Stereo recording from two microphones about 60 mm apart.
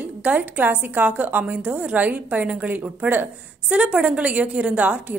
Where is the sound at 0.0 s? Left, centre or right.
Right.